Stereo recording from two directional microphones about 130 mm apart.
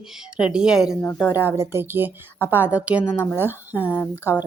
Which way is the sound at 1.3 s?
20° right (ahead or behind).